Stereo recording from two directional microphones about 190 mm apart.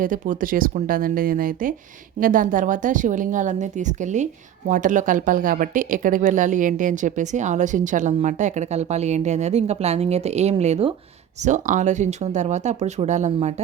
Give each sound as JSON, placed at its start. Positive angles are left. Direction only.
{"t": 0.0, "sound": "a woman's voice", "side_deg": -45}